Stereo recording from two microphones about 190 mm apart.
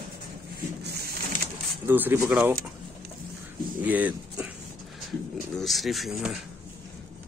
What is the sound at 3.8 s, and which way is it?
Speech, 10° right (ahead or behind).